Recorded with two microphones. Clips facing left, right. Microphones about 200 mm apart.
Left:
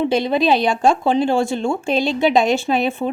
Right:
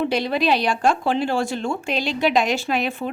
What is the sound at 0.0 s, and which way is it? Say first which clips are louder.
Speech: left 4 dB; 20° left (ahead or behind).